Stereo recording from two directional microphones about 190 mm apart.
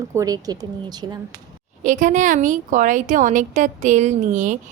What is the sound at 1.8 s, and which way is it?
A woman's voice, 40° right (ahead or behind).